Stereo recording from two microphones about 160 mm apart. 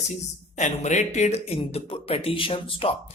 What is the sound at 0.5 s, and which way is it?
Speech, 45° left (ahead or behind).